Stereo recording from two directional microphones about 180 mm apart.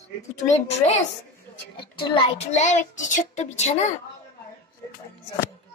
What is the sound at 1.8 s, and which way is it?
A child's voice, 25° left (ahead or behind).